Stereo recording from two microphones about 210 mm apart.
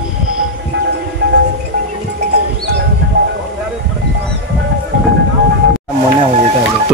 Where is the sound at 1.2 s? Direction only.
55° right (ahead or behind).